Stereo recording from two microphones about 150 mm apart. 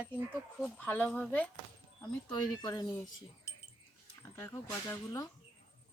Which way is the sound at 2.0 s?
20° left (ahead or behind).